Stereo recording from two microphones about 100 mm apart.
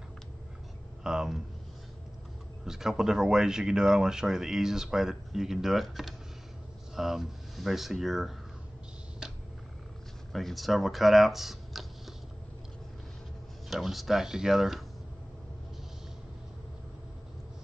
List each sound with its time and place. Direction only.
1.0 s speech: 5° right (ahead or behind)
2.6 s speech: 5° right (ahead or behind)
9.2 s a sound: 5° right (ahead or behind)
10.3 s speech: centre (ahead or behind)
13.7 s speech: centre (ahead or behind)